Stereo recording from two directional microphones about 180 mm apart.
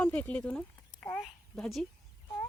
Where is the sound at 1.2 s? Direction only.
Centre (ahead or behind).